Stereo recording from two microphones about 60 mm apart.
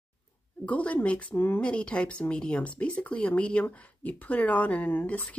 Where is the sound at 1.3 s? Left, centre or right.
Left.